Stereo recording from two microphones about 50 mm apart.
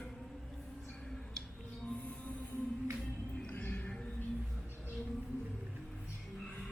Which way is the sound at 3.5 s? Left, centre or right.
Left.